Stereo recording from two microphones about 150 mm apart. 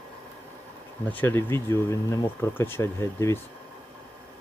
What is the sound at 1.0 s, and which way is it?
Speech, 10° left (ahead or behind).